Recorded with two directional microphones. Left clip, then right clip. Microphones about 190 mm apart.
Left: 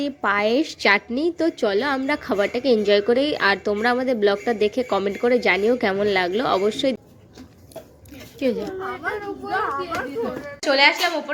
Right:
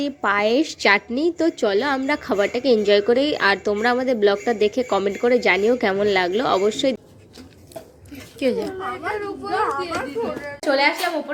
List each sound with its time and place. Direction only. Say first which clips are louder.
0.0 s a woman's voice: right 1 dB; centre (ahead or behind)
8.4 s a woman's voice: right 2 dB; centre (ahead or behind)
8.6 s a woman's voice: right 1 dB; 60° right (ahead or behind)
9.5 s children playing: right 2 dB; 50° right (ahead or behind)
10.6 s a woman's voice: left 2 dB; centre (ahead or behind)